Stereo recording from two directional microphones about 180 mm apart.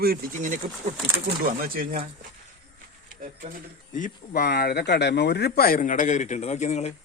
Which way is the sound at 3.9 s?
45° left (ahead or behind).